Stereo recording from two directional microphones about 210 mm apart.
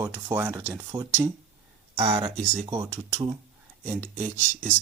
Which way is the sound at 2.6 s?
10° right (ahead or behind).